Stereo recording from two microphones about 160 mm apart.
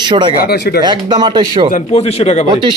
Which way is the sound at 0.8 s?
30° right (ahead or behind).